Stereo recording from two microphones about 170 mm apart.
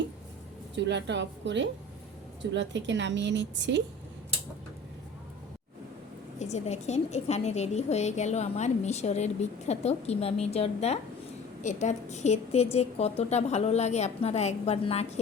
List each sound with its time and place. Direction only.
0.8 s a woman's voice: 90° right
6.4 s a woman's voice: 40° left (ahead or behind)